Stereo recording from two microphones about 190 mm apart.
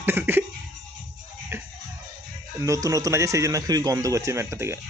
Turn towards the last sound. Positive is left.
turn(degrees=-15)  # may be behind; listen again after turning